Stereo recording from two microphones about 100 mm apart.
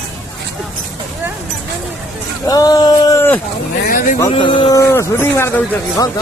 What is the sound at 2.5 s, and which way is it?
Speech, 40° left (ahead or behind).